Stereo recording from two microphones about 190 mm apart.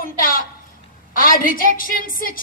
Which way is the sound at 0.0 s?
50° left (ahead or behind).